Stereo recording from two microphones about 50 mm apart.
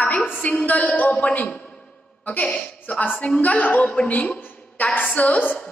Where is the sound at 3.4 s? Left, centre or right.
Left.